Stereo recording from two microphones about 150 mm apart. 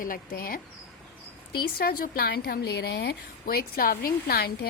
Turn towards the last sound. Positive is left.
turn(degrees=90)